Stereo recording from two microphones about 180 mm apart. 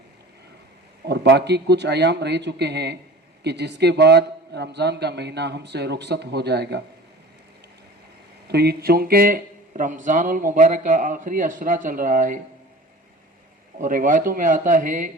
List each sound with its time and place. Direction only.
1.0 s a man's voice: 70° right (ahead or behind)
8.4 s speech: 65° right (ahead or behind)
13.7 s speech: 50° right (ahead or behind)